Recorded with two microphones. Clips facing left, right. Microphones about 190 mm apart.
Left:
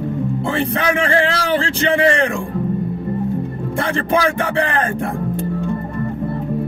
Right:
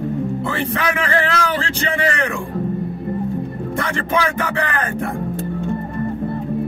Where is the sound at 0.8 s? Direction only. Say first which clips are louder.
Left 4 dB; 30° left (ahead or behind).